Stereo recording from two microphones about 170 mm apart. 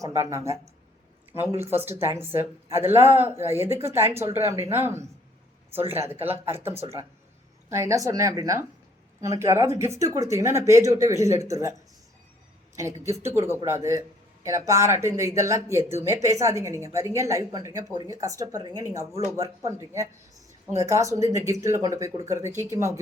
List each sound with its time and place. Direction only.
0.0 s speech: 15° right (ahead or behind)
7.7 s speech: 15° right (ahead or behind)
12.7 s speech: 15° right (ahead or behind)